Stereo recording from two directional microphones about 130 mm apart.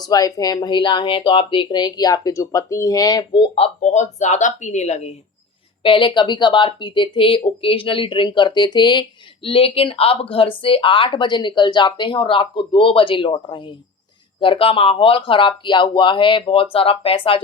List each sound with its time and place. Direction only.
0.0 s speech: 30° left (ahead or behind)
3.8 s speech: 65° left (ahead or behind)
5.8 s speech: 40° left (ahead or behind)